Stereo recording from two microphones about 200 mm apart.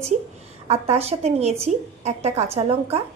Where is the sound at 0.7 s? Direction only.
30° right (ahead or behind).